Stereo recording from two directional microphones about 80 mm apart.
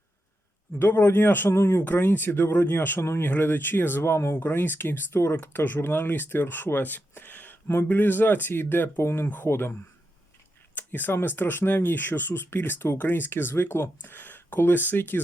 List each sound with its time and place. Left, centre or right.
0.8 s speech: left